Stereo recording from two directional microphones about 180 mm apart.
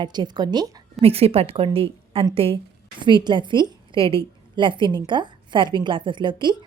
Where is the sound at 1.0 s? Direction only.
35° right (ahead or behind).